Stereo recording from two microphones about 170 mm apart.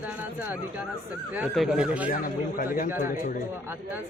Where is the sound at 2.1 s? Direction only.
55° left (ahead or behind).